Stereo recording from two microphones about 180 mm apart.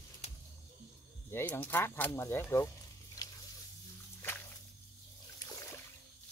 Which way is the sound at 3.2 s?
20° left (ahead or behind).